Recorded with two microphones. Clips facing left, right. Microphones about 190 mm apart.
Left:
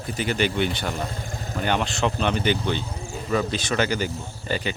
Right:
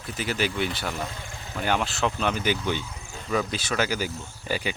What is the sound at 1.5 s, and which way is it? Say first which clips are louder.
Speech: left 1 dB; 5° right (ahead or behind).